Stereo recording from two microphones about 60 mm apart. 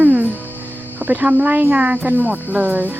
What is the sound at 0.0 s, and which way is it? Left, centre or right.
Music, right.